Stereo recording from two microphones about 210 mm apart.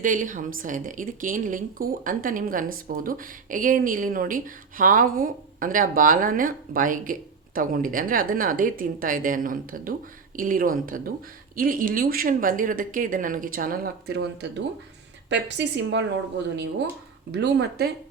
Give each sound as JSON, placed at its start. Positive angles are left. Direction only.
{"t": 0.0, "sound": "speech", "side_deg": -40}
{"t": 15.3, "sound": "a woman's voice", "side_deg": -55}
{"t": 17.3, "sound": "speech", "side_deg": -50}